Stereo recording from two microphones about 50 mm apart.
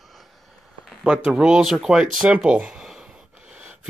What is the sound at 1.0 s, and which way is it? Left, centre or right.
Speech, right.